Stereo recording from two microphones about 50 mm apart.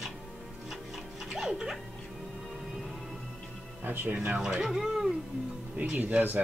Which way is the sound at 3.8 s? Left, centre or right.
Right.